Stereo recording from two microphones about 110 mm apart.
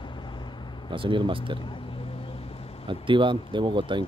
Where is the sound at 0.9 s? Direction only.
50° right (ahead or behind).